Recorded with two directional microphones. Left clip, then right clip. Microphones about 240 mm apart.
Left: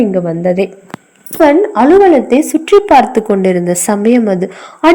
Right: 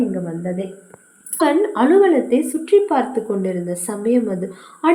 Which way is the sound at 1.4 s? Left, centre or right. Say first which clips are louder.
Left 8 dB; left.